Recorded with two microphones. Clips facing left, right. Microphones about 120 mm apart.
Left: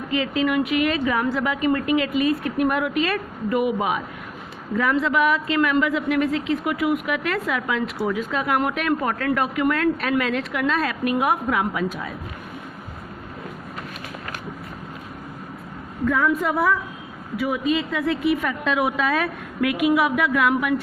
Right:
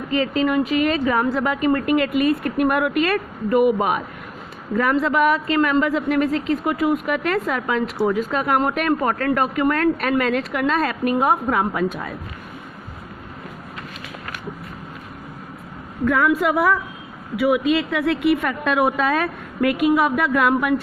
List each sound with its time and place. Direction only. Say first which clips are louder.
0.1 s a woman's voice: right 2 dB; 40° right (ahead or behind)
16.0 s a woman's voice: right 3 dB; 75° right (ahead or behind)
17.3 s a woman's voice: right 4 dB; 70° right (ahead or behind); by 20.8 s 45° right (ahead or behind)